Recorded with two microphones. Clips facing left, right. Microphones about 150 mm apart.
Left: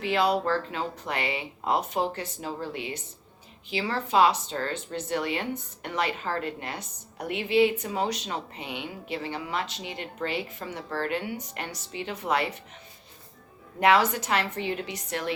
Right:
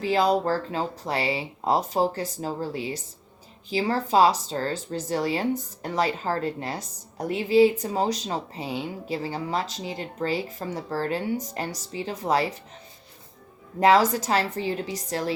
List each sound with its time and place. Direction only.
0.0 s speech: 40° right (ahead or behind)
13.7 s speech: 35° right (ahead or behind)